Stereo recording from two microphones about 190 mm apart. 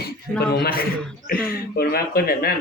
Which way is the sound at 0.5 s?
55° left (ahead or behind).